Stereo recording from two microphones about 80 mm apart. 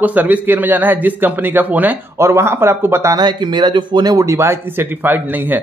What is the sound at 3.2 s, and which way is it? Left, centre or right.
Speech, right.